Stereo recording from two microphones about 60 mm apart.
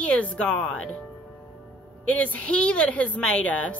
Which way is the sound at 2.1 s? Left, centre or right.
Left.